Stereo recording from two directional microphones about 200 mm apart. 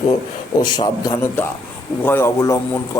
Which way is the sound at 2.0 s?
10° left (ahead or behind).